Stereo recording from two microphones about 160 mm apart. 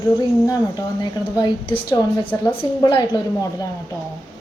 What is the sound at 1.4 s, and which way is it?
Speech, 30° left (ahead or behind).